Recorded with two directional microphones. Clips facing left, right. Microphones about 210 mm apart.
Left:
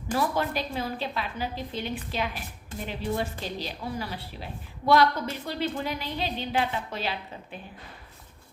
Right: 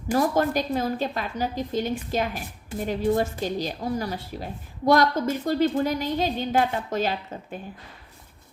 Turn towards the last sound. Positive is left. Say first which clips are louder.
# right 5 dB
turn(degrees=-45)  # may be behind; listen again after turning